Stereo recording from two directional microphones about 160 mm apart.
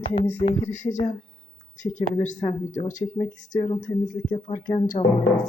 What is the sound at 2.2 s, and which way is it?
Speech, 50° left (ahead or behind).